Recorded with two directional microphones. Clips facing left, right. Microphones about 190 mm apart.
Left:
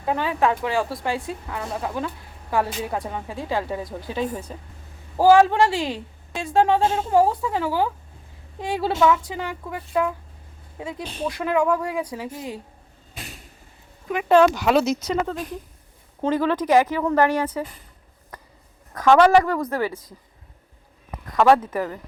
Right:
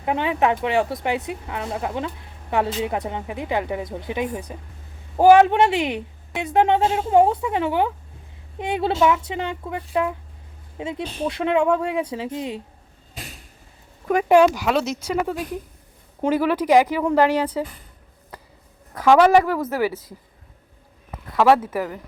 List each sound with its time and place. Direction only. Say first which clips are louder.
0.0 s a woman's voice: right 1 dB; 20° right (ahead or behind)
14.3 s a woman's voice: even; 15° right (ahead or behind)
14.7 s speech: left 3 dB; centre (ahead or behind)
15.0 s a woman's voice: right 1 dB; 10° right (ahead or behind)
18.9 s a woman's voice: right 1 dB; 5° right (ahead or behind)
21.3 s a woman's voice: even; 5° right (ahead or behind)